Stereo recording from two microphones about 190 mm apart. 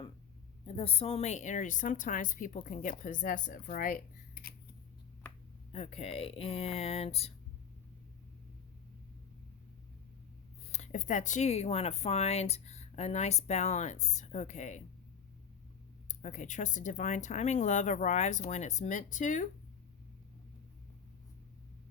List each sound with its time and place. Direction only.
0.6 s a woman's voice: 30° left (ahead or behind); by 4.5 s 50° left (ahead or behind)
5.7 s speech: 35° left (ahead or behind)
10.7 s speech: 40° left (ahead or behind)
16.0 s speech: 40° left (ahead or behind)